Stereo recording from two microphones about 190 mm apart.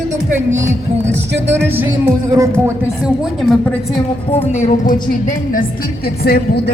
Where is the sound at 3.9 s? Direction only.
30° left (ahead or behind).